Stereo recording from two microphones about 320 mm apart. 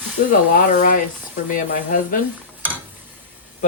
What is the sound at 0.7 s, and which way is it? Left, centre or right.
Speech, left.